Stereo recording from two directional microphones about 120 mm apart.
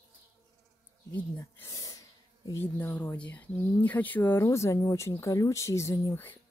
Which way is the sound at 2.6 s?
15° left (ahead or behind).